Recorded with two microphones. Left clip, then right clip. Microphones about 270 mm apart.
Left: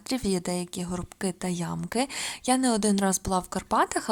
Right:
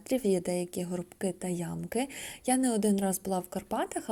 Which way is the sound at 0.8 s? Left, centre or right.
Centre.